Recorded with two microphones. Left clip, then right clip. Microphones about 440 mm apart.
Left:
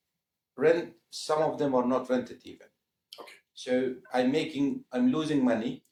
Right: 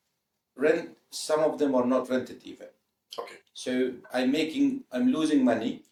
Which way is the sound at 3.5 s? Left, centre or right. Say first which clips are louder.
Even; centre.